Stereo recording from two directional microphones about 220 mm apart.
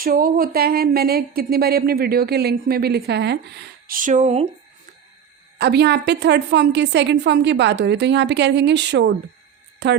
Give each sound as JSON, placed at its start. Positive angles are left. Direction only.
{"t": 0.0, "sound": "a woman's voice", "side_deg": -40}
{"t": 3.8, "sound": "speech", "side_deg": -35}
{"t": 5.5, "sound": "a woman's voice", "side_deg": -50}